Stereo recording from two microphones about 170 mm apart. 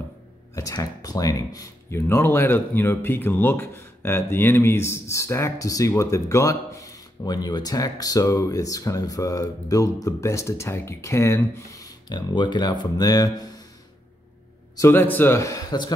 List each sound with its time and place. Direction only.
0.6 s speech: 20° left (ahead or behind)
14.8 s a man's voice: 10° left (ahead or behind)